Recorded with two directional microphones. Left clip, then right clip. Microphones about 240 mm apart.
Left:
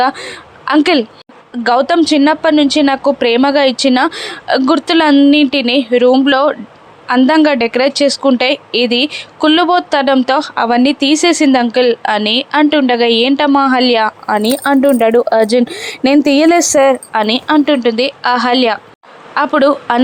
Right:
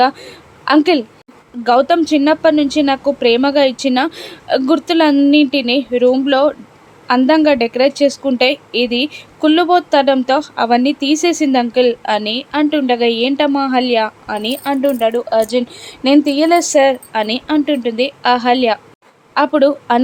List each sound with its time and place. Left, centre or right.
0.0 s a woman's voice: centre
14.4 s speech: left; by 20.0 s centre